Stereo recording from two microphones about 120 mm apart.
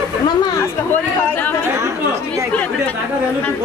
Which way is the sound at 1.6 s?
25° right (ahead or behind).